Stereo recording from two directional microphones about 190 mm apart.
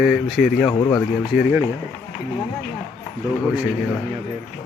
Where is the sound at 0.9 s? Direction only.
5° right (ahead or behind).